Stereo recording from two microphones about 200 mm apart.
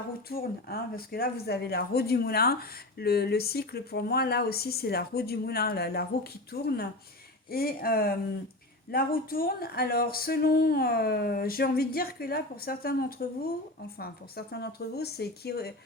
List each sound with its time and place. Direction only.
0.3 s speech: 50° left (ahead or behind)